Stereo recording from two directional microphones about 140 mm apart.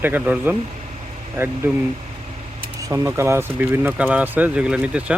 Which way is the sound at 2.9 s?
20° right (ahead or behind).